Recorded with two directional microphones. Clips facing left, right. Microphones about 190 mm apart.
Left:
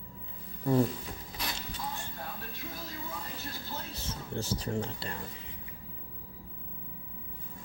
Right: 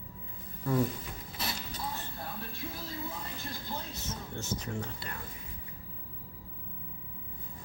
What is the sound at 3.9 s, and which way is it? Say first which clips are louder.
Speech: left 3 dB; 30° left (ahead or behind).